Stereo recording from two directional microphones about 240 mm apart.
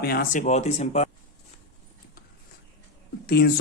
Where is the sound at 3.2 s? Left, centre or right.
Left.